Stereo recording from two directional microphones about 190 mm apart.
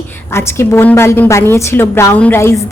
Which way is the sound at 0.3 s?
15° left (ahead or behind).